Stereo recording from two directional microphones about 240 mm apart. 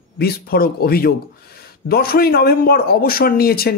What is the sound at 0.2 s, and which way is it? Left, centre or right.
Speech, left.